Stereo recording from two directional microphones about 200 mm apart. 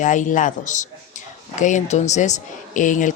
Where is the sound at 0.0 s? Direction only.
40° left (ahead or behind).